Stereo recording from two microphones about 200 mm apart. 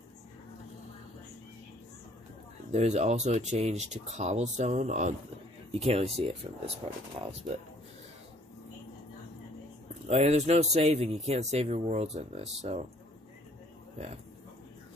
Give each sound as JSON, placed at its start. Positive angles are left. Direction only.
{"t": 2.7, "sound": "speech", "side_deg": -35}
{"t": 10.0, "sound": "speech", "side_deg": -30}